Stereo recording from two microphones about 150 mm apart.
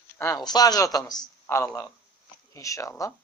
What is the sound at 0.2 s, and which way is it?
Speech, 25° left (ahead or behind).